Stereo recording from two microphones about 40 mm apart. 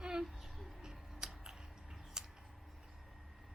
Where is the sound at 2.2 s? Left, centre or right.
Centre.